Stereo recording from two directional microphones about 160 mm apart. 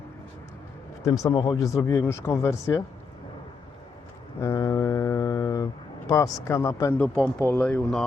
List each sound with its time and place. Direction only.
1.0 s speech: 20° left (ahead or behind)
4.4 s a sound: 20° left (ahead or behind)
6.1 s speech: 20° left (ahead or behind)
7.2 s speech: 5° left (ahead or behind)